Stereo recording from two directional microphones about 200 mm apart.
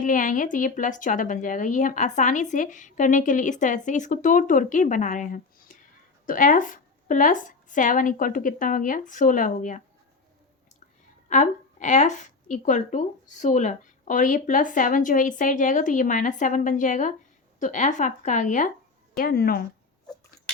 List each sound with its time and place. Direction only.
0.0 s a woman's voice: 40° left (ahead or behind)
11.3 s a woman's voice: 40° left (ahead or behind)